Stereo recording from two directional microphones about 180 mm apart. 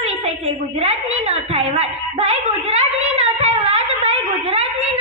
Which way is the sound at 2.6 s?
35° right (ahead or behind).